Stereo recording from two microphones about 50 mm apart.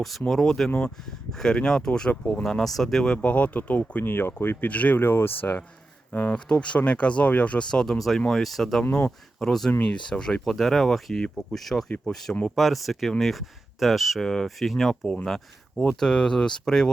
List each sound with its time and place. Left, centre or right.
0.3 s speech: centre
3.1 s speech: left
4.0 s speech: left
4.7 s speech: left
4.9 s speech: left
6.5 s speech: left
7.6 s speech: centre
7.9 s speech: centre
8.9 s speech: left
9.4 s speech: centre